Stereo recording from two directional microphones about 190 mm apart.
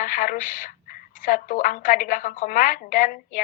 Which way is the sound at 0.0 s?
45° left (ahead or behind).